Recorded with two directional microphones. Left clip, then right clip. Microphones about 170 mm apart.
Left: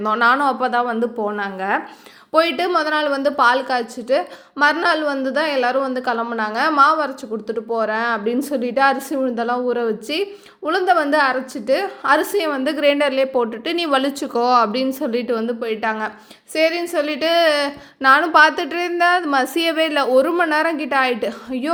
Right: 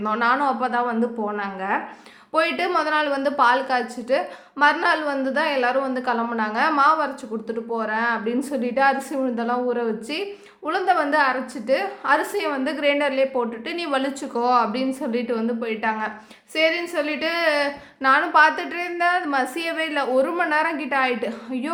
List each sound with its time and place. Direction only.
0.0 s a woman's voice: 35° left (ahead or behind)